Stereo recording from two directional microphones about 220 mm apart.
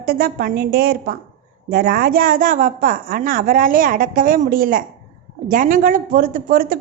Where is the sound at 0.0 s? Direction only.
45° right (ahead or behind).